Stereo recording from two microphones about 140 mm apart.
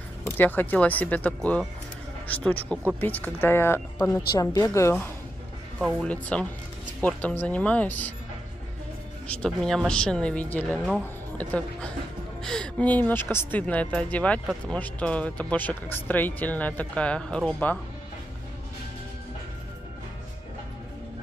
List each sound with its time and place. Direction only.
0.4 s a woman's voice: 15° left (ahead or behind)
5.8 s speech: centre (ahead or behind)
6.0 s speech: 10° left (ahead or behind)
9.3 s speech: 5° left (ahead or behind)